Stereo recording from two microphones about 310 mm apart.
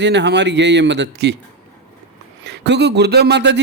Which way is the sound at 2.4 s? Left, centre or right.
Right.